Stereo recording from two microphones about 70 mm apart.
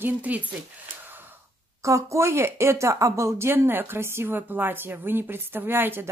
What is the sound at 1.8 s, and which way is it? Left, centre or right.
Speech, right.